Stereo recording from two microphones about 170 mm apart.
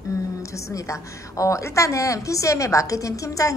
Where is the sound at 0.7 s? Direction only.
20° left (ahead or behind).